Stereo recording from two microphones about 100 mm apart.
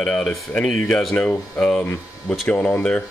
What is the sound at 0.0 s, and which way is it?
Speech, 10° left (ahead or behind).